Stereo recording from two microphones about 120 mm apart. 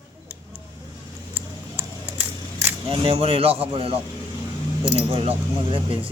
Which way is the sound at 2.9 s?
55° right (ahead or behind).